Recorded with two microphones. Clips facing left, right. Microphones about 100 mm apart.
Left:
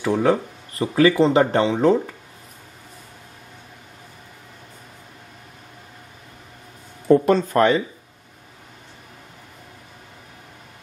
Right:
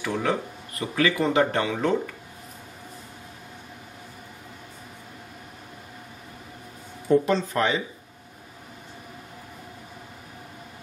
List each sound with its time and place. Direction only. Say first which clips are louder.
0.0 s speech: left 7 dB; 35° left (ahead or behind)
7.2 s speech: left 7 dB; 50° left (ahead or behind)